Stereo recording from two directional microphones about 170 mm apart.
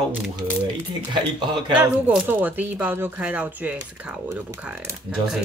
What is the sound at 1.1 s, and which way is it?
Speech, 30° right (ahead or behind).